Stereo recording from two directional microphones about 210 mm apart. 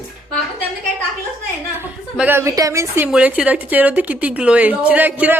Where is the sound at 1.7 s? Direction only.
10° right (ahead or behind).